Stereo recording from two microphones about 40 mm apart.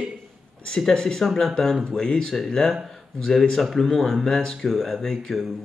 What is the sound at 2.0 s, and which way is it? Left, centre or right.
Speech, centre.